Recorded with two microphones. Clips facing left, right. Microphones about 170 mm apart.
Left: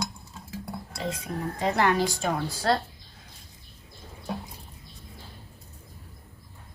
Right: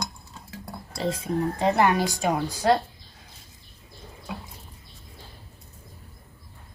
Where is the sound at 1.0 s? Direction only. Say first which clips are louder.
Right 6 dB; 25° right (ahead or behind).